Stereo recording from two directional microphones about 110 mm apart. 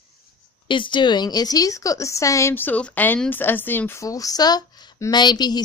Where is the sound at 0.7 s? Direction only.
50° left (ahead or behind).